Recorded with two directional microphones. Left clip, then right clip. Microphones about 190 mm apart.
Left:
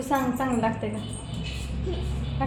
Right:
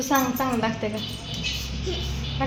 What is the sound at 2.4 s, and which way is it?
Speech, 40° right (ahead or behind).